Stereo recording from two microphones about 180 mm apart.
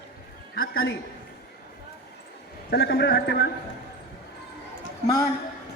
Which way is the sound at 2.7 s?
60° left (ahead or behind).